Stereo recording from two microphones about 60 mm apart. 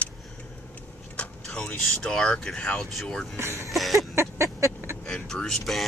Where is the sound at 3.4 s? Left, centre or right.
Right.